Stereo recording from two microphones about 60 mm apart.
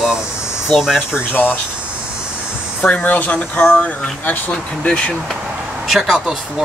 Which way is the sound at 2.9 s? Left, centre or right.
Left.